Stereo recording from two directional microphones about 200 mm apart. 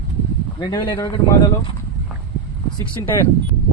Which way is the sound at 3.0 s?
15° left (ahead or behind).